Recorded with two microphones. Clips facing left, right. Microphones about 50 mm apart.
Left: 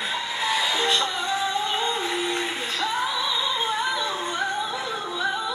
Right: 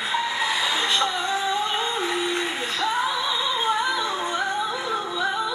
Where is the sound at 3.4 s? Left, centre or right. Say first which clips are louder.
Right 2 dB; centre.